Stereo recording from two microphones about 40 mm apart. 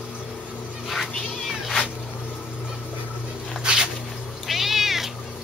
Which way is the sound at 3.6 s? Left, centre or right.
Right.